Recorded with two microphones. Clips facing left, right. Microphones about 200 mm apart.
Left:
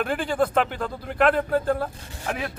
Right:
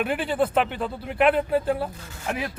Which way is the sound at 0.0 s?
5° right (ahead or behind).